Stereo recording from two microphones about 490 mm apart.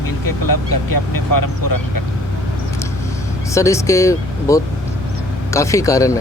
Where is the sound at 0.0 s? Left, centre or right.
Left.